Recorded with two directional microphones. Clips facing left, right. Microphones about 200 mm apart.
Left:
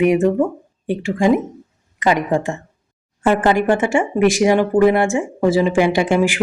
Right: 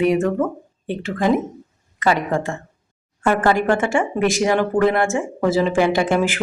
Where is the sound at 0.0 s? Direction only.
15° left (ahead or behind).